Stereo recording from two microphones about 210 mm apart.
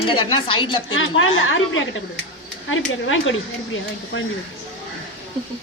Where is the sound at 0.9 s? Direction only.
70° left (ahead or behind).